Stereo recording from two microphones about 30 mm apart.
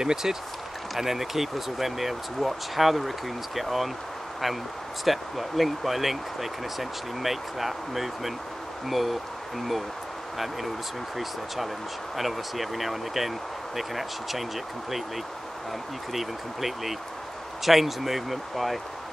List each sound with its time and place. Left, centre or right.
0.0 s speech: centre
5.0 s speech: centre
10.3 s speech: centre
16.1 s speech: centre